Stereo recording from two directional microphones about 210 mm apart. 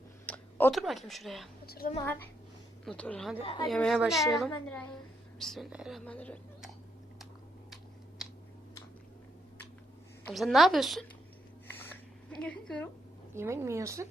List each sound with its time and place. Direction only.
0.3 s speech: 5° left (ahead or behind)
1.6 s a woman's voice: 45° left (ahead or behind)
2.0 s a child's voice: 10° left (ahead or behind)
3.4 s speech: 20° left (ahead or behind)
3.7 s a woman's voice: centre (ahead or behind)
10.2 s a woman's voice: centre (ahead or behind)
11.7 s a sound: 5° left (ahead or behind)
13.3 s speech: 10° right (ahead or behind)